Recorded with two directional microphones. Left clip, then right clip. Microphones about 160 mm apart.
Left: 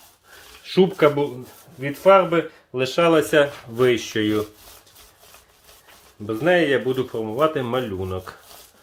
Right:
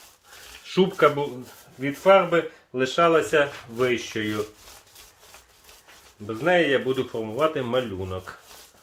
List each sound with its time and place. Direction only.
0.6 s speech: 30° left (ahead or behind)
1.8 s speech: 45° left (ahead or behind); by 4.4 s 75° left (ahead or behind)
6.4 s speech: 35° left (ahead or behind)